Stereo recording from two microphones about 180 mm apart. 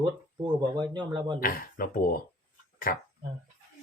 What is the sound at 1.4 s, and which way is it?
Speech, 50° left (ahead or behind).